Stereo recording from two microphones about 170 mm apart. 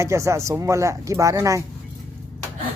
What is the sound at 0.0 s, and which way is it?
Speech, 15° right (ahead or behind).